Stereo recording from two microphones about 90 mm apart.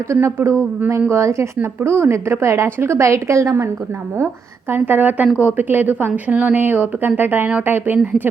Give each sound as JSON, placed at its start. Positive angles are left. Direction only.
{"t": 0.1, "sound": "a woman's voice", "side_deg": -30}
{"t": 4.7, "sound": "speech", "side_deg": -20}